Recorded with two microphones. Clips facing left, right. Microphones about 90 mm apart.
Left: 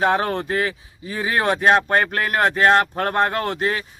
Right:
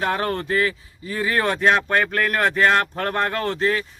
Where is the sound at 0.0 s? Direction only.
25° left (ahead or behind).